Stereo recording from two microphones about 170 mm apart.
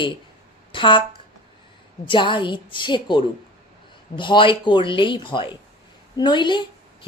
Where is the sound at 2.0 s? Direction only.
30° left (ahead or behind).